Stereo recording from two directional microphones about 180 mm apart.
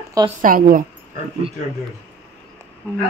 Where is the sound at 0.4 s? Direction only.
50° right (ahead or behind).